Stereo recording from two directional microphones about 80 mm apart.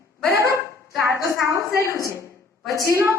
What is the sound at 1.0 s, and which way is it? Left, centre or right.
A woman's voice, right.